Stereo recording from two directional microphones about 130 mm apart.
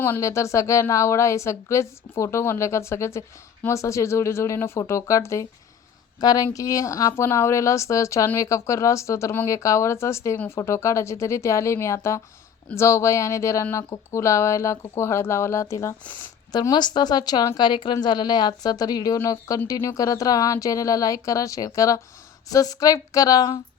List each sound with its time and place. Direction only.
0.0 s speech: 20° left (ahead or behind)